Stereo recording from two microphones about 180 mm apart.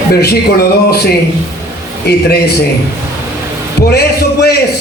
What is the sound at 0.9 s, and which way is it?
Speech, 60° left (ahead or behind).